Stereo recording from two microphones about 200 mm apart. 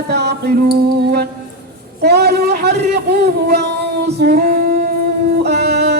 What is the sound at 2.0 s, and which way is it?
A man's voice, 55° right (ahead or behind).